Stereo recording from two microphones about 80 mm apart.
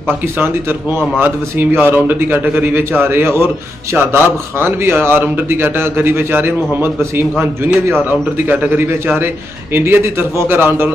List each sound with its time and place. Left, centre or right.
0.4 s speech: right